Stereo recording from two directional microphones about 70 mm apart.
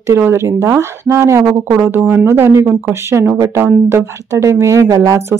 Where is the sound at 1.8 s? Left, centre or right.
Right.